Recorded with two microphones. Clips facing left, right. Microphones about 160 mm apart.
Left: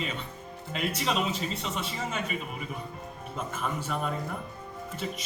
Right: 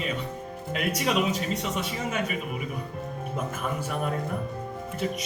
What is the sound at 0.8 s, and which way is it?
Speech, 55° right (ahead or behind).